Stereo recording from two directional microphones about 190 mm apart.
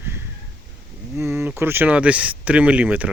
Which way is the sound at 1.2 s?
15° right (ahead or behind).